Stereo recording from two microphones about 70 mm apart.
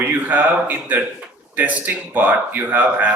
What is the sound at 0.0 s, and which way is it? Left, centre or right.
Speech, right.